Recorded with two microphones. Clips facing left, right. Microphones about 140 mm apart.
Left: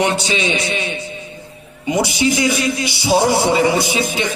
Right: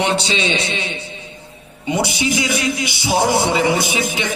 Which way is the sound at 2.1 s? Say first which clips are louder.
Left 3 dB; 20° right (ahead or behind).